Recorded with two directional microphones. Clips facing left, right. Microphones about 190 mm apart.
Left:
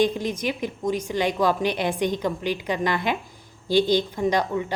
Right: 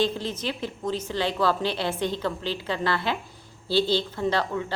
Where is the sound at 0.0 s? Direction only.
15° left (ahead or behind).